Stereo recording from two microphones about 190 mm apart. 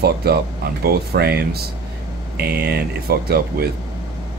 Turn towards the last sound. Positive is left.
turn(degrees=-55)  # may be behind; listen again after turning